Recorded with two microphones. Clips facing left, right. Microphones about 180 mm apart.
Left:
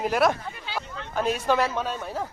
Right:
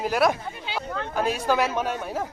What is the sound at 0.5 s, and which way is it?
Chatter, 20° right (ahead or behind).